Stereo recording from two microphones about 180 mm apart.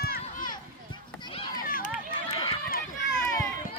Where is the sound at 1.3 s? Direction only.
25° left (ahead or behind).